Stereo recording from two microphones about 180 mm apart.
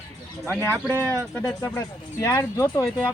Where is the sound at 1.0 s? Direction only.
10° left (ahead or behind).